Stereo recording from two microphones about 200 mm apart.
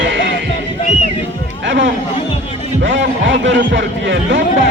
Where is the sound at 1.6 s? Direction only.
65° right (ahead or behind).